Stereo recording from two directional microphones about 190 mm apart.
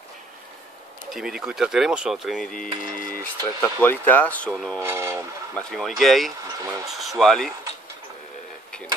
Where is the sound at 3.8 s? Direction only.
10° left (ahead or behind).